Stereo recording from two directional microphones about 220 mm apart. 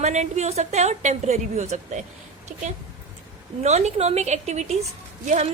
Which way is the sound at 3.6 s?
30° right (ahead or behind).